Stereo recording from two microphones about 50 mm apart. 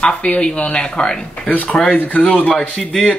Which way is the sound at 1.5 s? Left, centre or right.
Left.